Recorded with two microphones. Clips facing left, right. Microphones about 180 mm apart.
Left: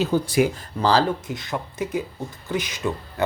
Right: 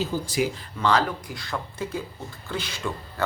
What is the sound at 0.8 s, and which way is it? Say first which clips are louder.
Speech: left 3 dB; 30° left (ahead or behind).